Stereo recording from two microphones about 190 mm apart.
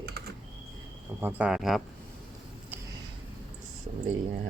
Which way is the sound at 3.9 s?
40° right (ahead or behind).